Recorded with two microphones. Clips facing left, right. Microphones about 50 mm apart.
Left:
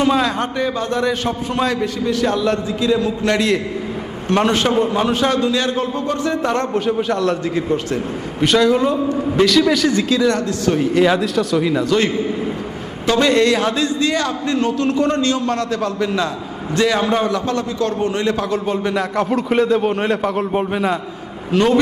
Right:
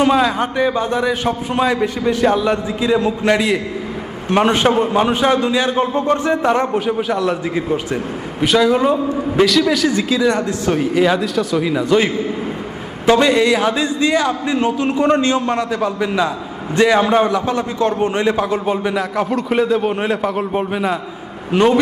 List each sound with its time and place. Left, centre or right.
0.0 s a man's voice: centre
8.7 s a man's voice: centre
9.3 s a man's voice: centre
10.9 s a man's voice: centre
21.5 s a man's voice: centre